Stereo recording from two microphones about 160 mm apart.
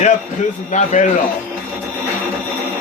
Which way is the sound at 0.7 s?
50° left (ahead or behind).